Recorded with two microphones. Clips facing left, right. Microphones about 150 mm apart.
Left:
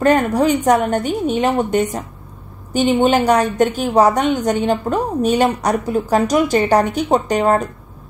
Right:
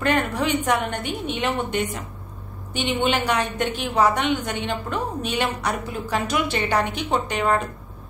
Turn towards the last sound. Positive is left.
turn(degrees=40)  # may be behind; listen again after turning